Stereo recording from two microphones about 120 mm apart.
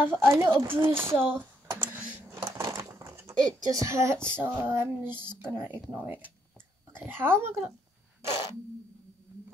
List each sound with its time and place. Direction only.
0.0 s speech: 20° right (ahead or behind)
0.5 s speech: 40° right (ahead or behind)
0.7 s a sound: 20° right (ahead or behind)
4.3 s female singing: 15° right (ahead or behind)
7.1 s speech: 20° right (ahead or behind)